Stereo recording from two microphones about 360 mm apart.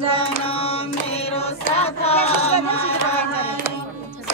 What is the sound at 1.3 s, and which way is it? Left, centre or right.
Chant, centre.